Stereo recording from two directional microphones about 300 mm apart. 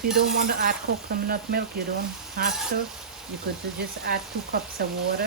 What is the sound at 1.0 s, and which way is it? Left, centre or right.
Frying, right.